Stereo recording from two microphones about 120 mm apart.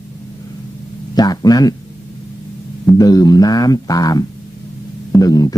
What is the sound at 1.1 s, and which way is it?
Speech, 35° left (ahead or behind).